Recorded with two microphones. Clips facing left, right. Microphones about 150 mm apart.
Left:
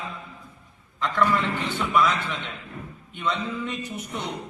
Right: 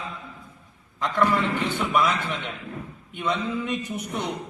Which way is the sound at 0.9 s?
15° right (ahead or behind).